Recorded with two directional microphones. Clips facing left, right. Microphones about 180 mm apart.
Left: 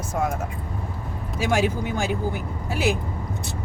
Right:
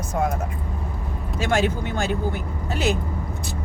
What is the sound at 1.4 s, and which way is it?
Speech, 10° left (ahead or behind).